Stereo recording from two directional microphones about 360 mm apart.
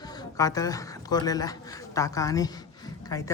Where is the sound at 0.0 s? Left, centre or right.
Centre.